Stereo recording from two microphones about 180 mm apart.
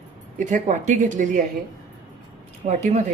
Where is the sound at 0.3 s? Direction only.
45° right (ahead or behind).